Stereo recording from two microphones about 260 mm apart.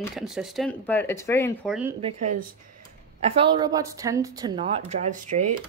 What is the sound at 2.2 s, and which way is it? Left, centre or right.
Speech, right.